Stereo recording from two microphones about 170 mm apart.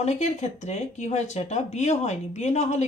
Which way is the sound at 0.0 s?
40° left (ahead or behind).